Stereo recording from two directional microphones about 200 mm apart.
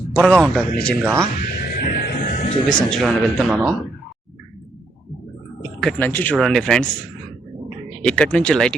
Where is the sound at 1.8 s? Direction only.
45° left (ahead or behind).